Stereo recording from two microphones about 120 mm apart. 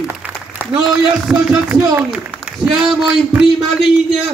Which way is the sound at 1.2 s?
10° right (ahead or behind).